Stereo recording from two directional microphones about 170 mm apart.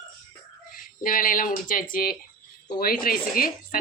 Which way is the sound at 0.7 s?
55° left (ahead or behind).